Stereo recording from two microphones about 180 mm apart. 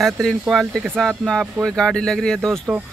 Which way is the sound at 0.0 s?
Centre (ahead or behind).